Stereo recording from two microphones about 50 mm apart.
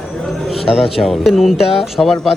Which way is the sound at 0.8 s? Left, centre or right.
Centre.